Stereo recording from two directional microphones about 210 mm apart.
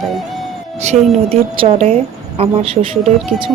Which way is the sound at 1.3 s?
30° right (ahead or behind).